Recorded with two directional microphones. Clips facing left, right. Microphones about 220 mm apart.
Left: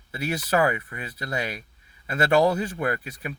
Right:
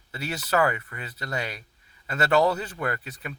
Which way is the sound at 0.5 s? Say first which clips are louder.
Left 1 dB; 20° left (ahead or behind).